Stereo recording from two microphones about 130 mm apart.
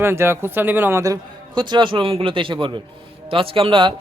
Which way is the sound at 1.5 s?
35° right (ahead or behind).